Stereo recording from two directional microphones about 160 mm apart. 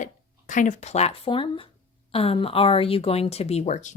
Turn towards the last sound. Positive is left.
turn(degrees=45)  # may be behind; listen again after turning